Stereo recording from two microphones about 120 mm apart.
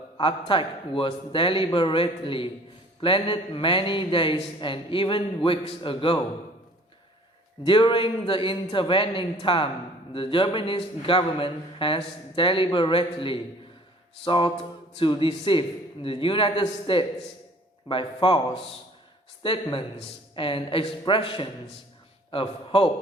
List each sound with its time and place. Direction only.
0.2 s a man's voice: 45° left (ahead or behind)
7.6 s a man's voice: 45° left (ahead or behind)